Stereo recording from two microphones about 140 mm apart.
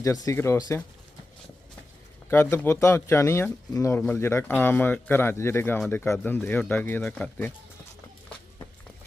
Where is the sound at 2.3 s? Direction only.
15° left (ahead or behind).